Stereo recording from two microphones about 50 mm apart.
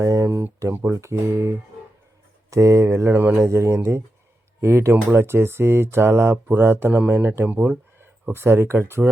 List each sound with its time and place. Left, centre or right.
0.0 s speech: right
0.7 s speech: right
1.1 s speech: right
2.5 s speech: right
3.1 s speech: right
3.5 s speech: right
5.1 s speech: right
6.9 s speech: right
8.3 s speech: right